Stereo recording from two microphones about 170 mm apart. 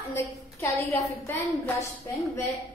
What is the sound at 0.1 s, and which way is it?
A woman's voice, 15° left (ahead or behind).